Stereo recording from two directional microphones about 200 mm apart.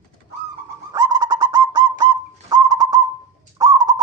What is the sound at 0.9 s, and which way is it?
Bird, 20° right (ahead or behind).